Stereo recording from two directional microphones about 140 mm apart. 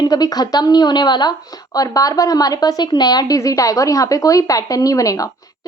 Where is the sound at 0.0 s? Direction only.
25° left (ahead or behind).